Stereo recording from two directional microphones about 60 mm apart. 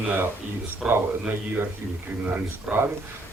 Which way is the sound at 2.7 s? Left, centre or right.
Centre.